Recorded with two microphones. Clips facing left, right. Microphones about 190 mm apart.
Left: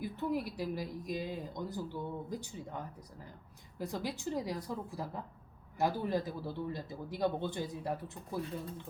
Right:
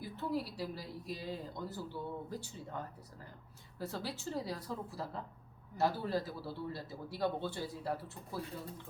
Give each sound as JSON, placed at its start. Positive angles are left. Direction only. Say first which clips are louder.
{"t": 0.0, "sound": "a man's voice", "louder": "left 3 dB", "side_deg": 15}
{"t": 3.8, "sound": "a man's voice", "louder": "left 3 dB", "side_deg": 15}